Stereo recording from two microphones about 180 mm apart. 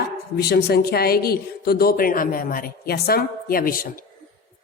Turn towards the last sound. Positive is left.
turn(degrees=55)  # may be behind; listen again after turning